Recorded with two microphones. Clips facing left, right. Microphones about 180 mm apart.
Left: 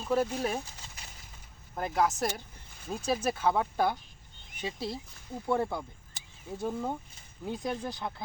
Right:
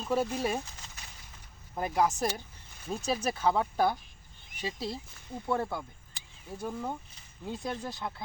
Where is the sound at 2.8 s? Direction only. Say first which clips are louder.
Left 1 dB; 10° left (ahead or behind).